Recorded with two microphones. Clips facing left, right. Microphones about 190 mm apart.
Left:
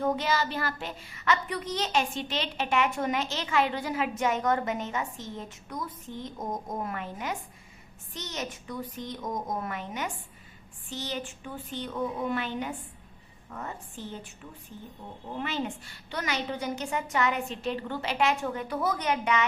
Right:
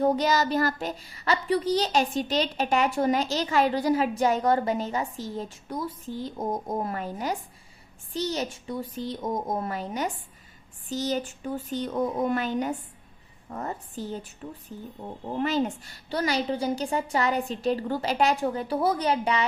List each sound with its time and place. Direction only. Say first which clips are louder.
0.0 s a woman's voice: right 5 dB; 40° right (ahead or behind)